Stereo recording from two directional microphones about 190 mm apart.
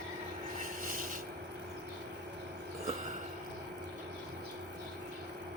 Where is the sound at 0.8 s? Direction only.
45° right (ahead or behind).